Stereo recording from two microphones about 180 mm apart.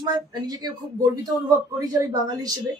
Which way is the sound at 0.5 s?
20° right (ahead or behind).